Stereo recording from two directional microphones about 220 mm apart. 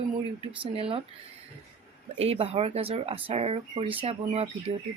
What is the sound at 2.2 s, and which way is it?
Speech, 25° right (ahead or behind).